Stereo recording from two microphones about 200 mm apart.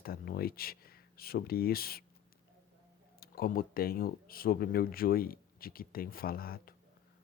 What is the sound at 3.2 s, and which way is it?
Speech, 50° left (ahead or behind).